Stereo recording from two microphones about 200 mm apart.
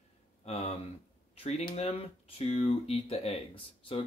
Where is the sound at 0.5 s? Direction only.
30° left (ahead or behind).